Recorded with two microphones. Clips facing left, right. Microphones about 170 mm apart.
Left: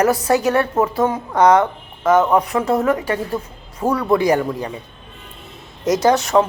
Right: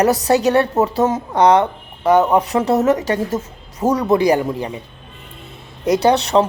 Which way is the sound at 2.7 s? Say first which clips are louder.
Right 2 dB; 40° right (ahead or behind).